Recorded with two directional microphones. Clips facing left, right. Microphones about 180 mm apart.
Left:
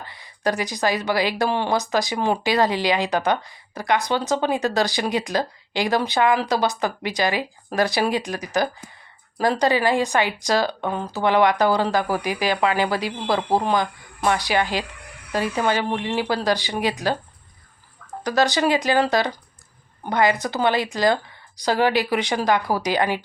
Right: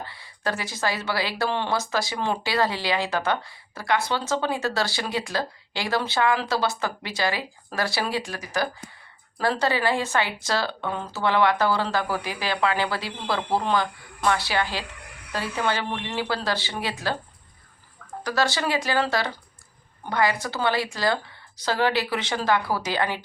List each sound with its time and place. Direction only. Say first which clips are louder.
0.0 s speech: left 5 dB; 15° left (ahead or behind)
18.2 s speech: left 5 dB; 20° left (ahead or behind)